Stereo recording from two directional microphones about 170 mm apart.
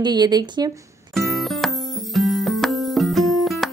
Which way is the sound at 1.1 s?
Centre (ahead or behind).